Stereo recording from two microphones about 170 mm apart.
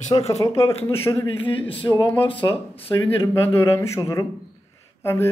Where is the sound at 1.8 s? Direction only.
25° left (ahead or behind).